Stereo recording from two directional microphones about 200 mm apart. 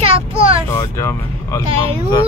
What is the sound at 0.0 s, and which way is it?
Child singing, 30° right (ahead or behind).